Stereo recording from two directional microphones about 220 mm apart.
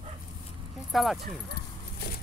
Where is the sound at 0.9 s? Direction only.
Centre (ahead or behind).